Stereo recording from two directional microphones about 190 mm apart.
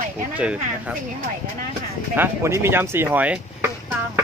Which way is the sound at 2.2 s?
15° right (ahead or behind).